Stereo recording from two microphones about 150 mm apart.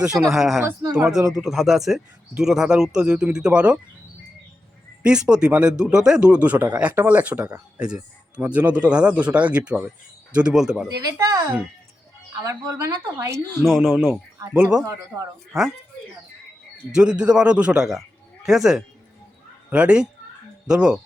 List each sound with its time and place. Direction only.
0.0 s speech: 5° right (ahead or behind)
0.6 s speech: 25° right (ahead or behind)
1.0 s speech: 5° right (ahead or behind)
5.0 s speech: 5° right (ahead or behind)
12.5 s speech: 25° right (ahead or behind)
13.7 s speech: centre (ahead or behind)
14.8 s speech: 20° right (ahead or behind)
16.9 s speech: 5° right (ahead or behind)